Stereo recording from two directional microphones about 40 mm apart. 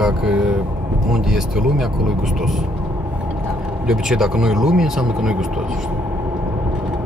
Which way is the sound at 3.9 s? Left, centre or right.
Centre.